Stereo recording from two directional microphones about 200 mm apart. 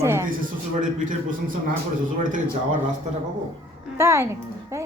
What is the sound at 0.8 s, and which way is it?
Speech, 40° right (ahead or behind).